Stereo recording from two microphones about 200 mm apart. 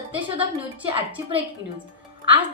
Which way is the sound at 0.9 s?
25° right (ahead or behind).